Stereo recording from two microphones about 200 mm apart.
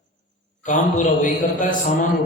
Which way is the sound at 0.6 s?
40° left (ahead or behind).